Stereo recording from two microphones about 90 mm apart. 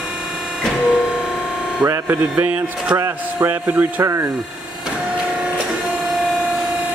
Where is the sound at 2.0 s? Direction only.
15° right (ahead or behind).